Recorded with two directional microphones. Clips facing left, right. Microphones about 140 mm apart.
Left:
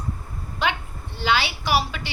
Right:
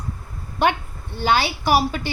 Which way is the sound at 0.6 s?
50° right (ahead or behind).